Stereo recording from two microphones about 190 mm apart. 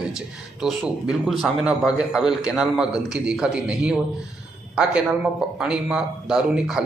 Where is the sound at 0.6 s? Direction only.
Centre (ahead or behind).